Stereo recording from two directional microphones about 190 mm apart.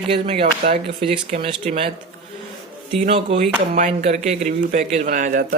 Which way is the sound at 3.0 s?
30° right (ahead or behind).